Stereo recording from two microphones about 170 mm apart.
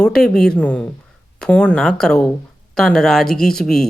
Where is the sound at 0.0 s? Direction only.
5° left (ahead or behind).